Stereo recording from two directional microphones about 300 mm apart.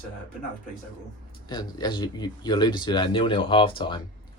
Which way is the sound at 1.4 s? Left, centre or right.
Centre.